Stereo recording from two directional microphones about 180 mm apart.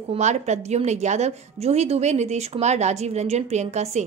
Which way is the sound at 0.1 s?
40° right (ahead or behind).